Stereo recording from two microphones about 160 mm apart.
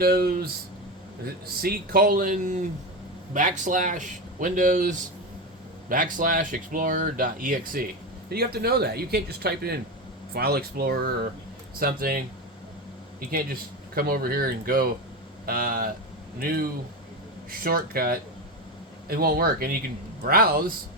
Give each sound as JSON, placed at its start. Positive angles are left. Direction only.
{"t": 0.0, "sound": "speech", "side_deg": -75}
{"t": 1.6, "sound": "speech", "side_deg": -70}
{"t": 8.5, "sound": "speech", "side_deg": -85}